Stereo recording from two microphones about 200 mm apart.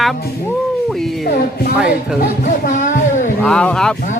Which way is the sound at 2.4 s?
40° left (ahead or behind).